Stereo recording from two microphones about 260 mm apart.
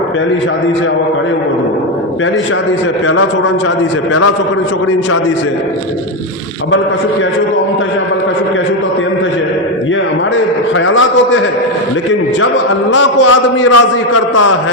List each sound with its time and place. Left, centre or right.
10.8 s a man's voice: left
13.6 s a man's voice: left